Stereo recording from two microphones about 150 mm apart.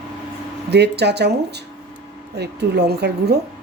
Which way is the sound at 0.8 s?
90° right.